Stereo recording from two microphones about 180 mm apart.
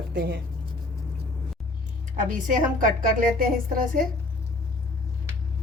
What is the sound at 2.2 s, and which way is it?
A woman's voice, 45° right (ahead or behind).